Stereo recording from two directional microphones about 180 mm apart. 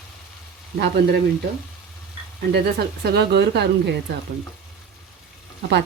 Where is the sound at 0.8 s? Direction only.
65° right (ahead or behind).